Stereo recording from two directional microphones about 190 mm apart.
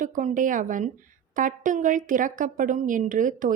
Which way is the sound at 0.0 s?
40° right (ahead or behind).